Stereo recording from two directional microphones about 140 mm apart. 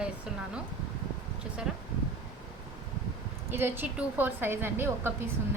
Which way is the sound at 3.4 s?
15° right (ahead or behind).